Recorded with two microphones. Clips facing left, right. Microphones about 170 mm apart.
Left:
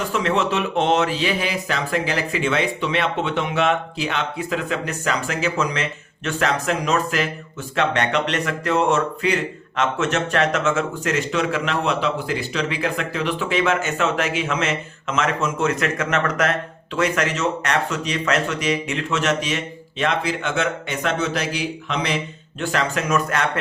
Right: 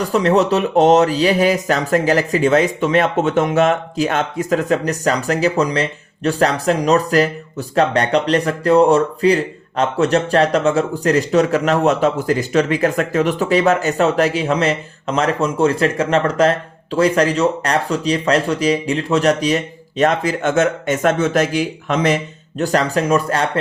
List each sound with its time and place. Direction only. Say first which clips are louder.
0.0 s speech: right 6 dB; 40° right (ahead or behind)